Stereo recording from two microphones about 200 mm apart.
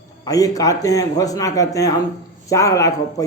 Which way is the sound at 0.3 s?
15° left (ahead or behind).